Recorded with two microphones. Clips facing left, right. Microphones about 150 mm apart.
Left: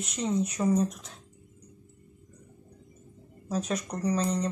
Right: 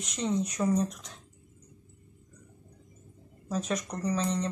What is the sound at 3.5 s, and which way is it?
Speech, 10° left (ahead or behind).